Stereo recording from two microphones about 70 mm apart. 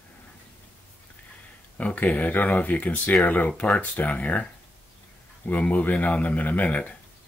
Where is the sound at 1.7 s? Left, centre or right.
Centre.